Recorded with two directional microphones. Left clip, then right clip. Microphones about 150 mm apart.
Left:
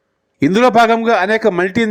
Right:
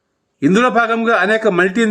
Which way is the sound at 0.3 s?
35° left (ahead or behind).